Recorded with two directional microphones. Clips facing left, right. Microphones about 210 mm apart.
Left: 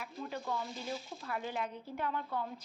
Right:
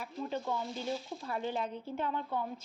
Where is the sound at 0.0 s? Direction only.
25° right (ahead or behind).